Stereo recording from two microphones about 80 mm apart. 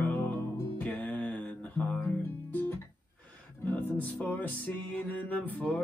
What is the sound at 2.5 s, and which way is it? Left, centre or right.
Guitar, left.